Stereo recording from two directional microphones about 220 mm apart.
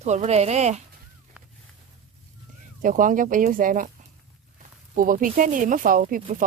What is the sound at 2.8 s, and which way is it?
Speech, 35° right (ahead or behind).